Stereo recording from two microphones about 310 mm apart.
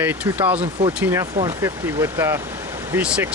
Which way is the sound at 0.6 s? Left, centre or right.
Centre.